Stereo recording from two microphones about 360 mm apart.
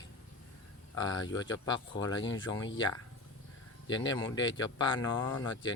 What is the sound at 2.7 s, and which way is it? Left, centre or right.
Speech, left.